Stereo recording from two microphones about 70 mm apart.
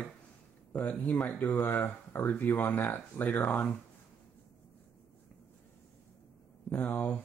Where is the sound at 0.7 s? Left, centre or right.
Left.